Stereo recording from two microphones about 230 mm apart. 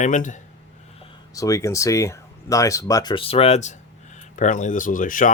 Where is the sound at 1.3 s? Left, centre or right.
Centre.